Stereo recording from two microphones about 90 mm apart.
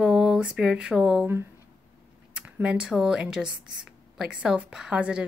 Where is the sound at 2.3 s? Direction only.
10° right (ahead or behind).